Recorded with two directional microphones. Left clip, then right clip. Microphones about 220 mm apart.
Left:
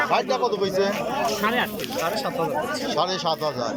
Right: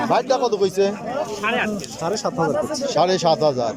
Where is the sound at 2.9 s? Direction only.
20° right (ahead or behind).